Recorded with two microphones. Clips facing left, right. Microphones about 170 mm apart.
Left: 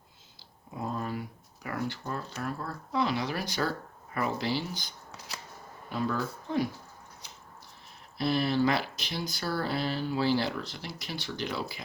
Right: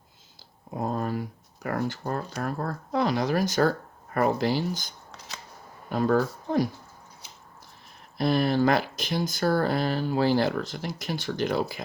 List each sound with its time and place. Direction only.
0.7 s speech: 45° right (ahead or behind)
8.2 s speech: 50° right (ahead or behind)